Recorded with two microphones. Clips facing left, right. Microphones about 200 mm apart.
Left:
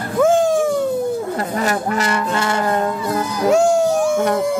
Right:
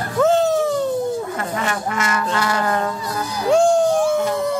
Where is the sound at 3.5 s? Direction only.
5° left (ahead or behind).